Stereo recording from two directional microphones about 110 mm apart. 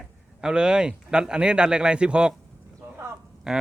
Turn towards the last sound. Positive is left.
turn(degrees=-5)  # may be behind; listen again after turning